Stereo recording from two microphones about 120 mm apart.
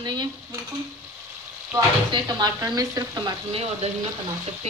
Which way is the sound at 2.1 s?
35° right (ahead or behind).